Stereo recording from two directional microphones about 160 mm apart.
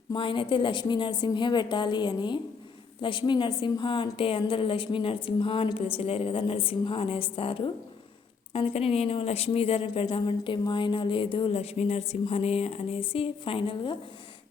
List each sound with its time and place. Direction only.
0.1 s a woman's voice: 30° left (ahead or behind)